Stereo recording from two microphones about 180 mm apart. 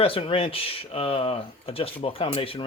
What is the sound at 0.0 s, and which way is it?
Speech, 30° left (ahead or behind).